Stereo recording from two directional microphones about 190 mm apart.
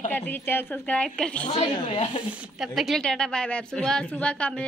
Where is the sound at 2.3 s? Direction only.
5° right (ahead or behind).